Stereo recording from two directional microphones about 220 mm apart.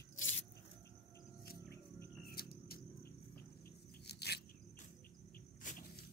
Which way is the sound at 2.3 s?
45° left (ahead or behind).